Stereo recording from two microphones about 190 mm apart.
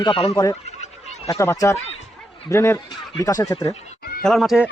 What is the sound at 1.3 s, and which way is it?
Speech, 15° left (ahead or behind).